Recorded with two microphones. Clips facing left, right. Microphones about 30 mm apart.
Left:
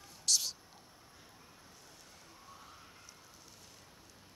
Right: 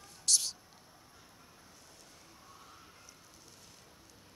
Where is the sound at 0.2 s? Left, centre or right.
Centre.